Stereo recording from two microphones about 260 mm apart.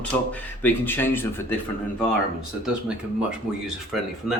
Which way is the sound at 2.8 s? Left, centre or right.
Centre.